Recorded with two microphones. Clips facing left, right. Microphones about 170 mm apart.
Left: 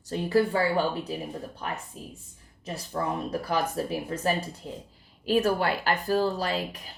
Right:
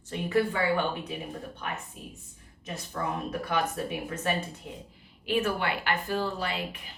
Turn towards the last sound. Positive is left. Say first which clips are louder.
# left 3 dB
turn(degrees=40)  # may be behind; listen again after turning